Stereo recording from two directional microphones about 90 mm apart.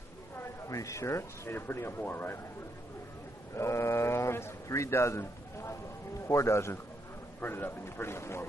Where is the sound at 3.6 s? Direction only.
30° left (ahead or behind).